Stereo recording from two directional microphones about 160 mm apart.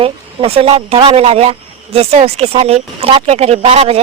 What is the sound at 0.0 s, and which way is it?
Speech, 40° right (ahead or behind).